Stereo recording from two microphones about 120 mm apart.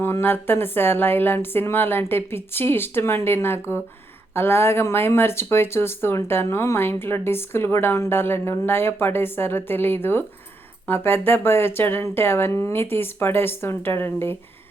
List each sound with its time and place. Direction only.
0.0 s speech: 20° left (ahead or behind)